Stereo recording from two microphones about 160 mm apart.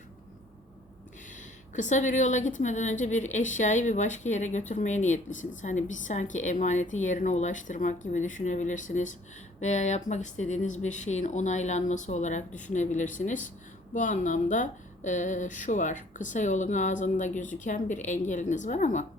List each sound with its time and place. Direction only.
1.4 s speech: 50° left (ahead or behind)